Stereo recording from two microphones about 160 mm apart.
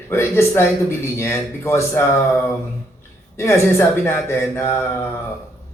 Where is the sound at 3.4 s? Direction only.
15° left (ahead or behind).